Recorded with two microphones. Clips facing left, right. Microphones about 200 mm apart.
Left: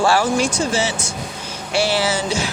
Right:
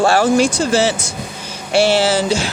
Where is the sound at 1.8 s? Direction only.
25° right (ahead or behind).